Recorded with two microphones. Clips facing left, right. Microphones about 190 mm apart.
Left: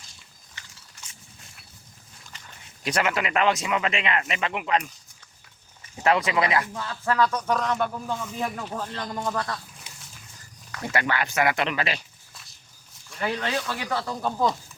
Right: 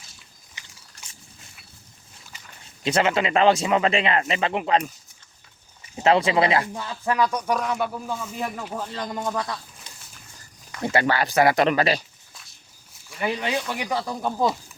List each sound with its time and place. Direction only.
1.0 s a sound: 35° right (ahead or behind)
2.8 s speech: 25° right (ahead or behind)
6.0 s speech: 25° right (ahead or behind)
6.7 s speech: 15° right (ahead or behind)
10.8 s speech: 30° right (ahead or behind)
13.1 s speech: 10° right (ahead or behind)